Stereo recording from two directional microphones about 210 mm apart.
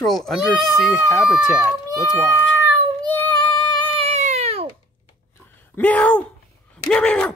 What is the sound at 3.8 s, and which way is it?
Baby cry, 25° right (ahead or behind).